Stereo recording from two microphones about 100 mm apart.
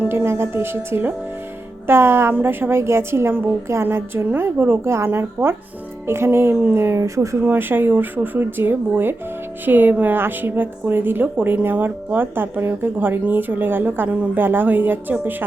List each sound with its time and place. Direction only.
0.1 s a woman's voice: 25° right (ahead or behind)